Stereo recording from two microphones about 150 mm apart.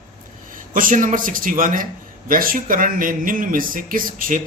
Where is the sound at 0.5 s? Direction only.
65° right (ahead or behind).